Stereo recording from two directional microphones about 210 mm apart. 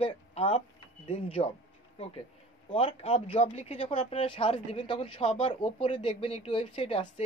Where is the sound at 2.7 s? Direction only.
30° left (ahead or behind).